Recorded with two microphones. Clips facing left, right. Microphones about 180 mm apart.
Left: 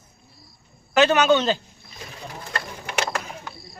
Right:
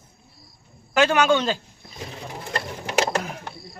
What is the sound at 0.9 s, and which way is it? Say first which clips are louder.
Speech: left 1 dB; 10° right (ahead or behind).